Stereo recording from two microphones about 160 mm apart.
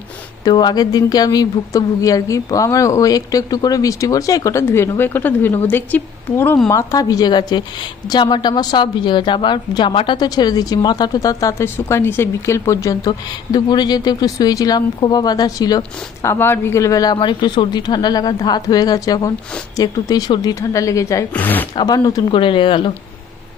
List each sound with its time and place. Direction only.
0.4 s a woman's voice: 25° left (ahead or behind)
21.8 s speech: 25° left (ahead or behind)